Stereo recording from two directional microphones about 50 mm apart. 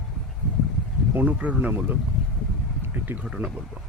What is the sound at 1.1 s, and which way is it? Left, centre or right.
Speech, right.